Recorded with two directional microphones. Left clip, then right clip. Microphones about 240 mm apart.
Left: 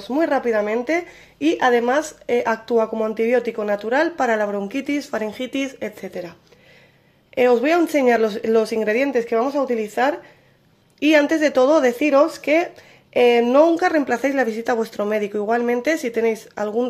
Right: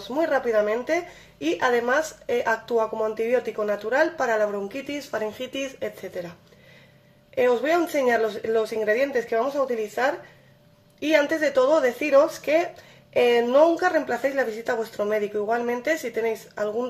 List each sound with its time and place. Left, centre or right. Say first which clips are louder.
0.1 s speech: left 3 dB; left
7.3 s speech: left 5 dB; left